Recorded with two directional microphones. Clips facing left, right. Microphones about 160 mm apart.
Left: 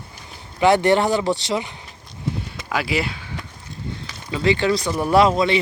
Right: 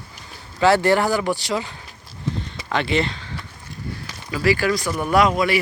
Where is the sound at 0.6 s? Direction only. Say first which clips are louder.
Left 1 dB; 20° left (ahead or behind).